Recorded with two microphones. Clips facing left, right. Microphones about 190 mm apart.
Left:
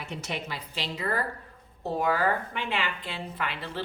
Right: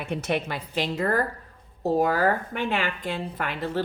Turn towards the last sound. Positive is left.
turn(degrees=-45)  # may be behind; listen again after turning